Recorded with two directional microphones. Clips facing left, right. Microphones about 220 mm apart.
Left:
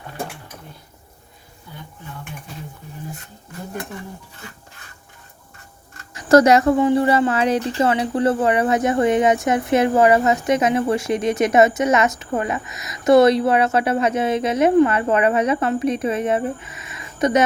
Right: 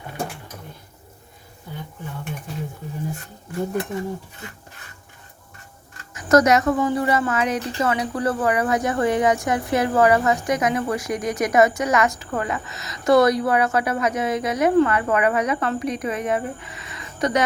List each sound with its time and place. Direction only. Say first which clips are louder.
6.1 s a woman's voice: left 3 dB; 30° left (ahead or behind)